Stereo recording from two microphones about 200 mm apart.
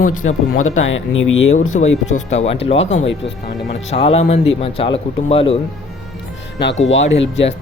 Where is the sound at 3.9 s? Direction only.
30° left (ahead or behind).